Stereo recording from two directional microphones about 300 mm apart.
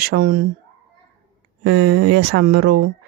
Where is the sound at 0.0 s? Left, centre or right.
Right.